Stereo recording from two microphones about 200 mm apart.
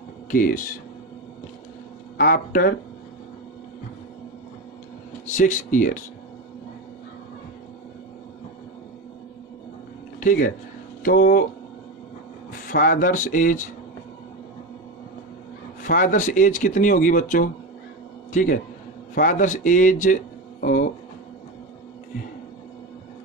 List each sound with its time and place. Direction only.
0.3 s speech: 45° left (ahead or behind)
2.1 s speech: 45° left (ahead or behind)
5.3 s speech: 40° left (ahead or behind)
10.2 s speech: 45° left (ahead or behind)
12.6 s speech: 45° left (ahead or behind)
15.8 s a man's voice: 40° left (ahead or behind)